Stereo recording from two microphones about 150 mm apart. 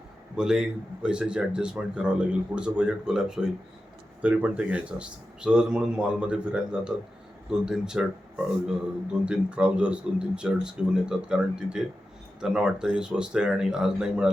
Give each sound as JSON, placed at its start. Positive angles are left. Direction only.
{"t": 0.3, "sound": "speech", "side_deg": -5}
{"t": 9.2, "sound": "speech", "side_deg": -5}